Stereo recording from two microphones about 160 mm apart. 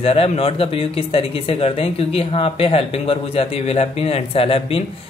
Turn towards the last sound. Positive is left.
turn(degrees=35)  # may be behind; listen again after turning